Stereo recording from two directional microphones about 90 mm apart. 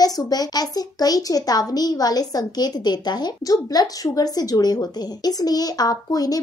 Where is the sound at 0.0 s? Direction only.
45° left (ahead or behind).